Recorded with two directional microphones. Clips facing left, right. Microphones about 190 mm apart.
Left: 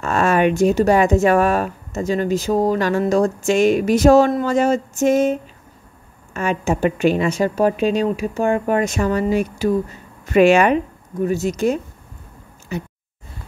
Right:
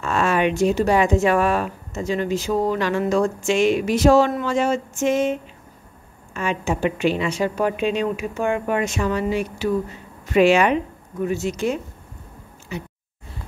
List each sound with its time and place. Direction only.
0.0 s speech: 45° left (ahead or behind)